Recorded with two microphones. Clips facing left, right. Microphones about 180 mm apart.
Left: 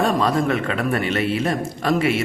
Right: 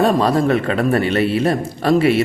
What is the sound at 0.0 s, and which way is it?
Speech, 35° right (ahead or behind).